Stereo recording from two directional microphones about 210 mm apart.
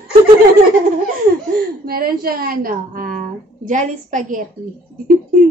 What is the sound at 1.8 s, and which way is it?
A woman's voice, 45° right (ahead or behind).